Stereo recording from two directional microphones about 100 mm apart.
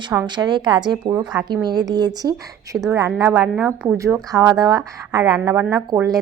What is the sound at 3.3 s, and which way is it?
Speech, 15° right (ahead or behind).